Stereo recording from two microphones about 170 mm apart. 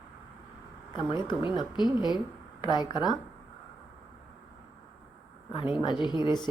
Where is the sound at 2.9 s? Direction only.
25° left (ahead or behind).